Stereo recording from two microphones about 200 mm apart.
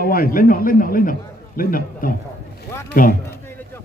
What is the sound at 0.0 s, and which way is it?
A man's voice, 45° left (ahead or behind).